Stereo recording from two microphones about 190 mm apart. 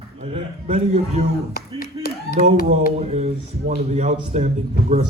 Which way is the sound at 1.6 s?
50° left (ahead or behind).